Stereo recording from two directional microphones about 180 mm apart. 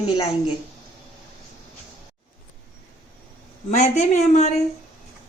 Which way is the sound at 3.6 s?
40° left (ahead or behind).